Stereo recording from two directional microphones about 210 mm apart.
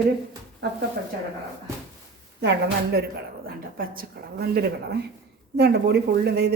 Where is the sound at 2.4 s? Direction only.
55° right (ahead or behind).